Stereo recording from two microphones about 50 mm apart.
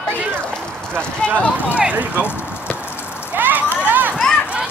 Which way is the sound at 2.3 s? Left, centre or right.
Left.